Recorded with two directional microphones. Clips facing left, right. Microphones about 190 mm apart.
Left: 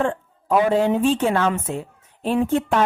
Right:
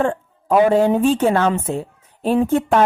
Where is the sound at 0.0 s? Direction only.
45° right (ahead or behind).